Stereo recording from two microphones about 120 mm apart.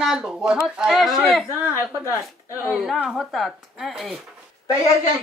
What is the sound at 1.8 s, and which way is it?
Speech, 20° right (ahead or behind).